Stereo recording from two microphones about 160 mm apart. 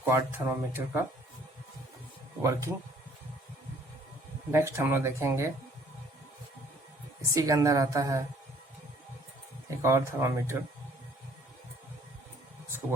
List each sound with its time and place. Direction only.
0.0 s speech: 15° right (ahead or behind)
2.4 s speech: 20° right (ahead or behind)
4.5 s speech: 15° right (ahead or behind)
7.3 s a woman's voice: 20° right (ahead or behind)
9.6 s speech: 15° right (ahead or behind)